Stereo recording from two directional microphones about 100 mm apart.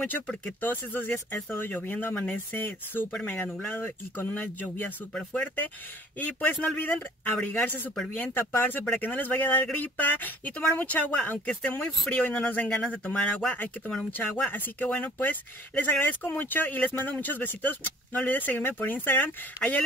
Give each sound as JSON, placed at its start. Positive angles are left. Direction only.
{"t": 0.6, "sound": "speech", "side_deg": 20}